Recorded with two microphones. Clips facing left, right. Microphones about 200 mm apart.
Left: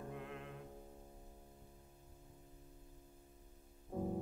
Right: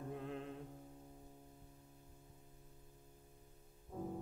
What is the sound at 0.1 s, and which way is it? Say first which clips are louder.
Music: right 3 dB; 30° right (ahead or behind).